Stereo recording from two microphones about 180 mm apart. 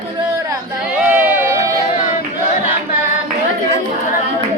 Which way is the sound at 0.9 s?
10° right (ahead or behind).